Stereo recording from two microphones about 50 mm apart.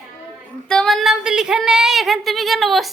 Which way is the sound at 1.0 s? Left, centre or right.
Centre.